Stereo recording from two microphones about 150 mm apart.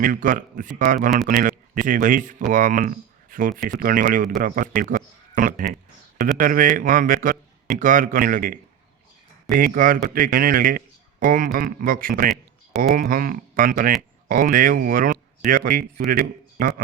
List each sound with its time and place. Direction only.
0.0 s speech: 65° right (ahead or behind)
12.3 s a sound: centre (ahead or behind)
12.9 s a man's voice: 70° right (ahead or behind)